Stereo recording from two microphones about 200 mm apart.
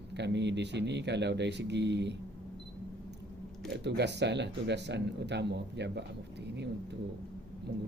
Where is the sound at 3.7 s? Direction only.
60° right (ahead or behind).